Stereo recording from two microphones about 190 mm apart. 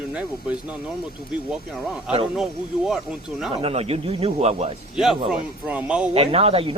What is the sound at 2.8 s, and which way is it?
Speech, centre (ahead or behind).